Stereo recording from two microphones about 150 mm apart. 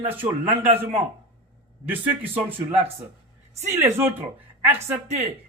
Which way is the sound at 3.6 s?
15° right (ahead or behind).